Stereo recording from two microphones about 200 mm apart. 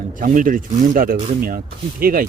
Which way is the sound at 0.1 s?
40° right (ahead or behind).